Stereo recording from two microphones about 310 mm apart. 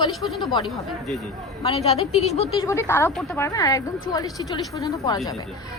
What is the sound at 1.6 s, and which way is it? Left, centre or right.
A woman's voice, centre.